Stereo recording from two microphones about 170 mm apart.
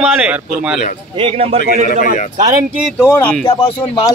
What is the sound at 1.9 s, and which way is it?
Speech, 50° left (ahead or behind).